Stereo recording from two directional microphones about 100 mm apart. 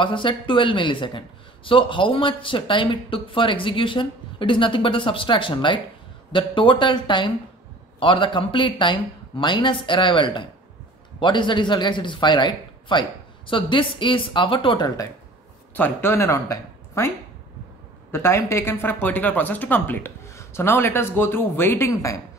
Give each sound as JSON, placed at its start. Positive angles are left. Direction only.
{"t": 0.0, "sound": "a woman's voice", "side_deg": 55}
{"t": 15.7, "sound": "speech", "side_deg": 20}
{"t": 18.1, "sound": "speech", "side_deg": 25}